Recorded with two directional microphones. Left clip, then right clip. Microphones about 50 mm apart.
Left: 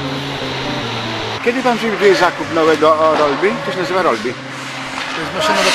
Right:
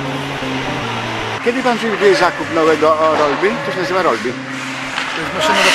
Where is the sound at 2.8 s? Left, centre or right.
Centre.